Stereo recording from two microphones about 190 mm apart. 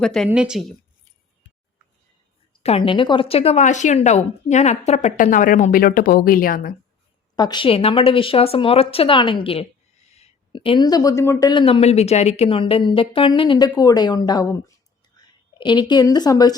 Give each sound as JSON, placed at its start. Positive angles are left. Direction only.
{"t": 0.0, "sound": "speech", "side_deg": 5}
{"t": 2.5, "sound": "a woman's voice", "side_deg": 30}
{"t": 7.3, "sound": "speech", "side_deg": 25}
{"t": 11.6, "sound": "speech", "side_deg": 30}